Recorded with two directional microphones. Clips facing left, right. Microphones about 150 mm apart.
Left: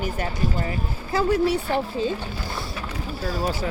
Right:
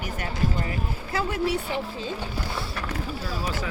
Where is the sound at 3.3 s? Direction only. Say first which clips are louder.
Left 8 dB; 45° left (ahead or behind).